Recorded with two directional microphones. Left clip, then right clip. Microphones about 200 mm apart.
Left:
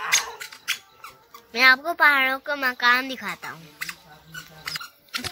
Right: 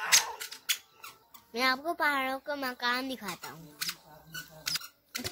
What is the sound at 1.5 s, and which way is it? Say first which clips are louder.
Speech: left 12 dB; 10° right (ahead or behind).